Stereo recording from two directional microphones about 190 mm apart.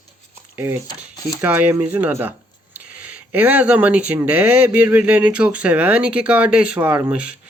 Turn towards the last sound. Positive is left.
turn(degrees=-5)  # may be behind; listen again after turning